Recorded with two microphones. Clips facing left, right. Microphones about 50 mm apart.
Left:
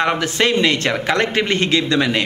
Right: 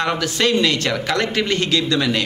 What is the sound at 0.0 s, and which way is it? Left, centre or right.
Speech, left.